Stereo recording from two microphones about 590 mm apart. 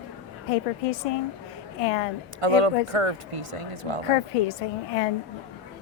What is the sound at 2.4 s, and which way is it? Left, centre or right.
Speech, right.